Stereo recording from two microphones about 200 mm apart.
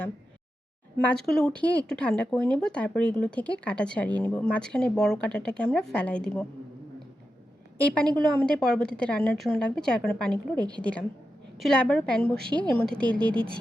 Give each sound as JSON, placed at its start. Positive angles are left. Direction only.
{"t": 1.0, "sound": "speech", "side_deg": 0}
{"t": 7.9, "sound": "speech", "side_deg": 5}